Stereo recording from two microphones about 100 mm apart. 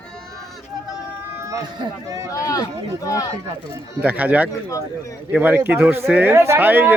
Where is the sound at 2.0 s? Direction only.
35° right (ahead or behind).